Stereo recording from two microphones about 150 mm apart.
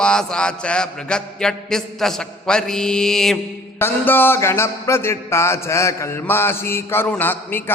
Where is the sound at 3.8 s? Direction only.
15° left (ahead or behind).